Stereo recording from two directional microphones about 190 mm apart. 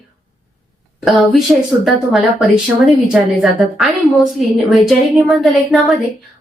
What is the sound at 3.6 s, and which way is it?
A woman's voice, centre (ahead or behind).